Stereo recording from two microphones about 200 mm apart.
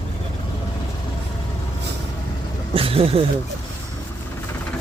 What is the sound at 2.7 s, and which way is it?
Speech, 30° right (ahead or behind).